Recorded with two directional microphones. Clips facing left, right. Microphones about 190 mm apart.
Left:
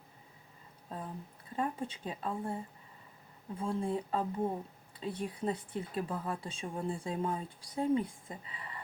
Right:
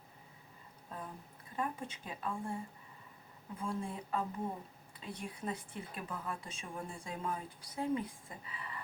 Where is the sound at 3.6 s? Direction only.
30° left (ahead or behind).